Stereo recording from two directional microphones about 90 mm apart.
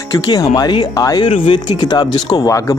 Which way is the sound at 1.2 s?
90° left.